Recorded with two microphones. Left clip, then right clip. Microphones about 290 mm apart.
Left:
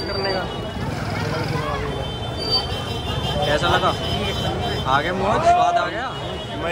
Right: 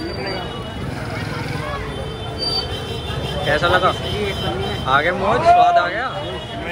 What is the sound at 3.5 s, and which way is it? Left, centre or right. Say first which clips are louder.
Speech: right 4 dB; centre.